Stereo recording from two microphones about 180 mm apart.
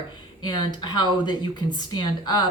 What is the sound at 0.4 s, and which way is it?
Speech, 25° left (ahead or behind).